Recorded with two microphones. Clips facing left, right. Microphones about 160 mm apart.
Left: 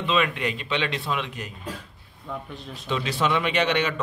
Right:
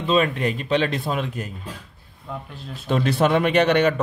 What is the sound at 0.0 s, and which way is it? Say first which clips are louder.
A man's voice: right 4 dB; 40° right (ahead or behind).